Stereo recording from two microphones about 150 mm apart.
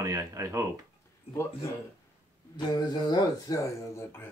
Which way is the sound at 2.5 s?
30° left (ahead or behind).